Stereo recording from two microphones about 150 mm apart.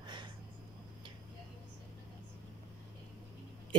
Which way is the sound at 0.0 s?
30° right (ahead or behind).